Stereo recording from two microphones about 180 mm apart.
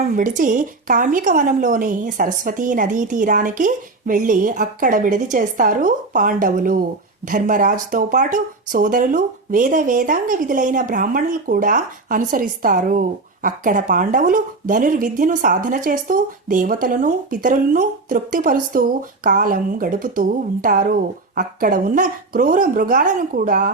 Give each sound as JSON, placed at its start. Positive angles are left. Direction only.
{"t": 0.2, "sound": "speech", "side_deg": -45}